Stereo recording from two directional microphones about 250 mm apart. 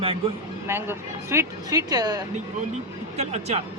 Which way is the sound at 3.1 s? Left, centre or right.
Right.